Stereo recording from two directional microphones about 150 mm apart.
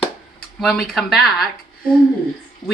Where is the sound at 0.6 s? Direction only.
Centre (ahead or behind).